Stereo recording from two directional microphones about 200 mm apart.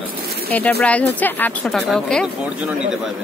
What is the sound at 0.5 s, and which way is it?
Speech, 10° left (ahead or behind).